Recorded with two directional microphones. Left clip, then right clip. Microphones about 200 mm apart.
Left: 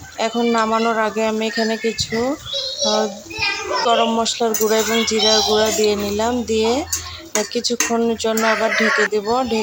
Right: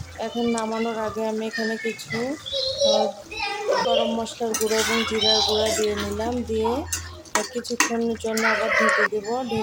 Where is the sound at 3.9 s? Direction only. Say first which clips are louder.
Left 6 dB; 15° left (ahead or behind).